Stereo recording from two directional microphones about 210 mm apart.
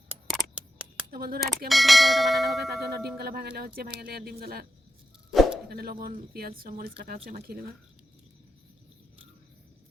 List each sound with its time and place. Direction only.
0.1 s scissors: 5° right (ahead or behind)
1.1 s speech: 45° right (ahead or behind)
1.5 s church bell: centre (ahead or behind)
3.2 s speech: 50° right (ahead or behind)
5.3 s a sound: centre (ahead or behind)
5.6 s speech: 45° right (ahead or behind)